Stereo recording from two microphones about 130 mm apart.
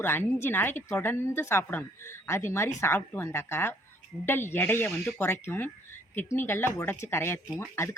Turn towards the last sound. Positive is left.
turn(degrees=20)  # may be behind; listen again after turning